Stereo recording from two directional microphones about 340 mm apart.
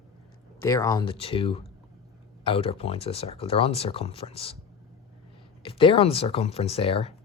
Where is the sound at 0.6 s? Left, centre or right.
Centre.